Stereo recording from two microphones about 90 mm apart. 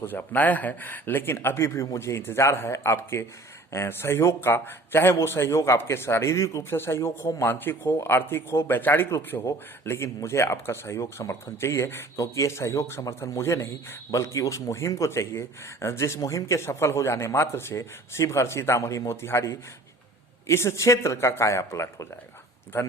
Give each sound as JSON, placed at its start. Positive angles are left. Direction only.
{"t": 0.0, "sound": "a man's voice", "side_deg": 25}